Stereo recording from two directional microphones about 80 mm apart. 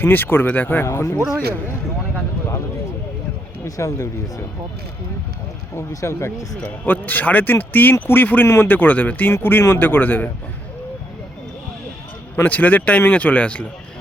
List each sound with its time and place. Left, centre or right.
0.0 s speech: left
0.9 s speech: left
3.6 s speech: left
5.7 s speech: left
6.6 s speech: left
12.4 s speech: left